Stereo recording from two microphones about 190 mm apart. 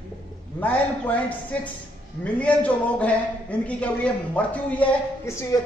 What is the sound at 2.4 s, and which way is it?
A man's voice, 5° left (ahead or behind).